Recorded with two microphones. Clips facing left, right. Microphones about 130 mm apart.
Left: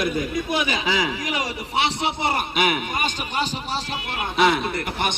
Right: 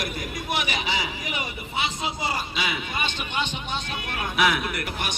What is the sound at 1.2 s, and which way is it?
A man's voice, 90° left.